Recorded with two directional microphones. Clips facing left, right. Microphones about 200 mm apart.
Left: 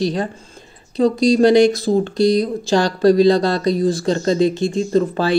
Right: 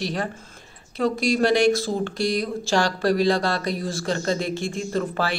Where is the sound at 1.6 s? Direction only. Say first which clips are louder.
Left 6 dB; 20° left (ahead or behind).